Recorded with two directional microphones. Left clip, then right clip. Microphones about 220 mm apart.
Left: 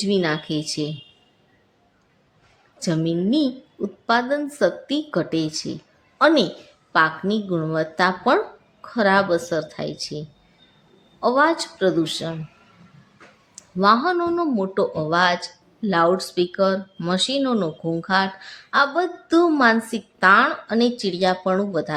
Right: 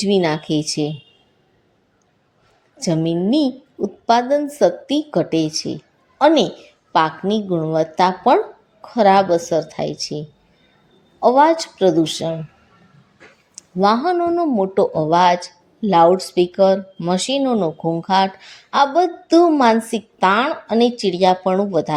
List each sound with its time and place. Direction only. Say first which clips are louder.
0.0 s speech: right 4 dB; 15° right (ahead or behind)
2.8 s speech: right 4 dB; 10° right (ahead or behind)
13.7 s a woman's voice: right 2 dB; 10° right (ahead or behind)